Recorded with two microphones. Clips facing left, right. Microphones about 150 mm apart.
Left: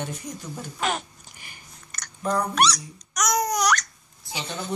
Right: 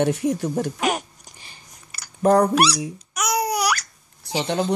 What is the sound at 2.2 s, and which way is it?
Speech, 70° right (ahead or behind).